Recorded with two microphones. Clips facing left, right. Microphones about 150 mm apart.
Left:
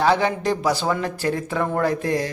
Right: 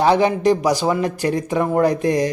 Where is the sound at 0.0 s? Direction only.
20° right (ahead or behind).